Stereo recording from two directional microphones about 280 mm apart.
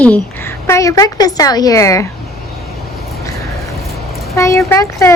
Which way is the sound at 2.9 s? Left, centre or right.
Centre.